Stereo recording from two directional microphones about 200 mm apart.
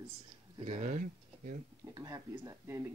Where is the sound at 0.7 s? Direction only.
40° right (ahead or behind).